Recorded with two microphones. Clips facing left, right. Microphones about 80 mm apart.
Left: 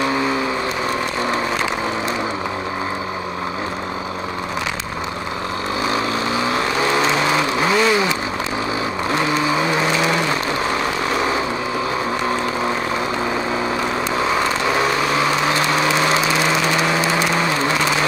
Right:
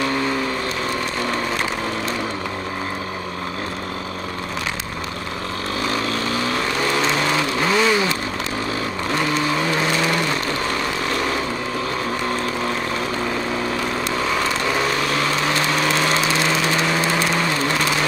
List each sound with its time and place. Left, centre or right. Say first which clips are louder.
5.9 s vehicle: left 2 dB; centre
9.1 s vehicle: left 2 dB; centre
14.1 s vehicle: left 3 dB; centre